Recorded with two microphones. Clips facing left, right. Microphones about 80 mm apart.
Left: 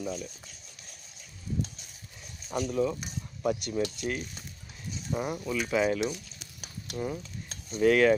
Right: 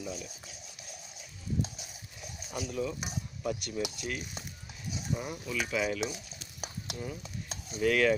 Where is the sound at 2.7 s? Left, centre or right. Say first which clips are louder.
Left 4 dB; left.